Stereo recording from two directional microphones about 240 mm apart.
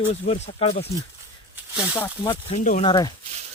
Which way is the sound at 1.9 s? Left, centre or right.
Centre.